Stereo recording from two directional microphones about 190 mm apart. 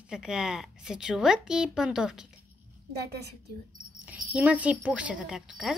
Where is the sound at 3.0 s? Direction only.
60° right (ahead or behind).